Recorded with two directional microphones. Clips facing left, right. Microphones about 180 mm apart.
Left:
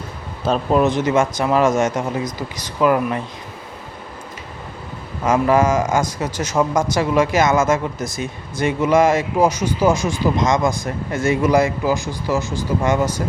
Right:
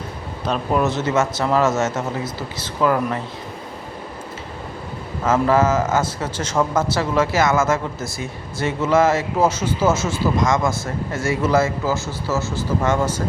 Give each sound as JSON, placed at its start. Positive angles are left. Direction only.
{"t": 0.4, "sound": "speech", "side_deg": 30}
{"t": 0.8, "sound": "speech", "side_deg": 15}
{"t": 5.2, "sound": "speech", "side_deg": 15}